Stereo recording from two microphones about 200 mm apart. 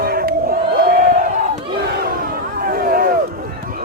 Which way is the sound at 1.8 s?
45° right (ahead or behind).